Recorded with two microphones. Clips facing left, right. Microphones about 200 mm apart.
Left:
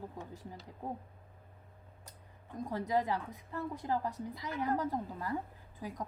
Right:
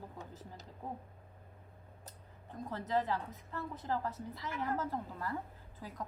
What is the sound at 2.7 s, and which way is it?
A woman's voice, 15° left (ahead or behind).